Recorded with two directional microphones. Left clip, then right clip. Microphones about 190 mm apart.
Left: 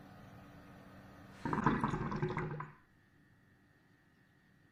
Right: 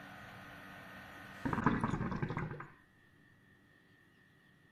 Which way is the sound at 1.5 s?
Centre (ahead or behind).